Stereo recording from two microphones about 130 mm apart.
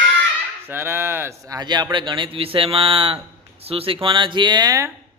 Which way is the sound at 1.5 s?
35° right (ahead or behind).